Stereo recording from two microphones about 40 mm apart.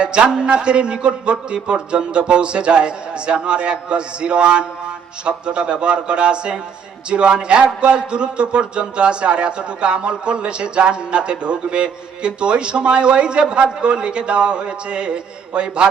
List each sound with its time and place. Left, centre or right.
0.0 s a man's voice: right